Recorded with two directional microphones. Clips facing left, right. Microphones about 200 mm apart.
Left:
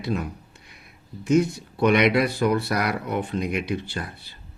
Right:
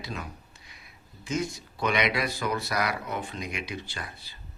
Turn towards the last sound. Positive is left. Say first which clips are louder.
# left 7 dB
turn(degrees=55)  # may be behind; listen again after turning